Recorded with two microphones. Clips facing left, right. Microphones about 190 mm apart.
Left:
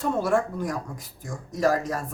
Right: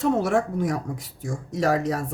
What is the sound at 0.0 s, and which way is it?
Speech, 70° right (ahead or behind).